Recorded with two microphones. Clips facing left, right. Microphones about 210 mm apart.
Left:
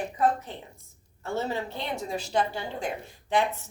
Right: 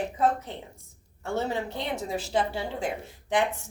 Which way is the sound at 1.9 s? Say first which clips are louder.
Even; 5° right (ahead or behind).